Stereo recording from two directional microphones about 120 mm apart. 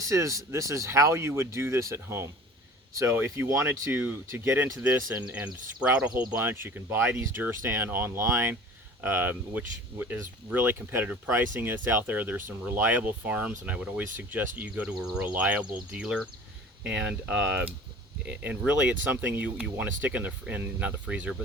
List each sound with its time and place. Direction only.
0.1 s speech: 25° right (ahead or behind)
5.8 s speech: 10° right (ahead or behind)